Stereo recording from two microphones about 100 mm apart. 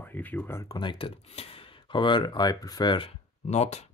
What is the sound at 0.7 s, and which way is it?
Speech, 55° left (ahead or behind).